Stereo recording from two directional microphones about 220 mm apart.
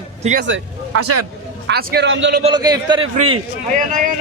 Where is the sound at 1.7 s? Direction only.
50° right (ahead or behind).